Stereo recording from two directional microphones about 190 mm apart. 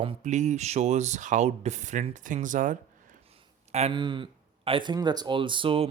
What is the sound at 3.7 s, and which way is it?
Speech, 30° right (ahead or behind).